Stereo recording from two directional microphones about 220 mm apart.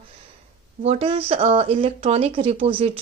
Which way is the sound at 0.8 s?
25° right (ahead or behind).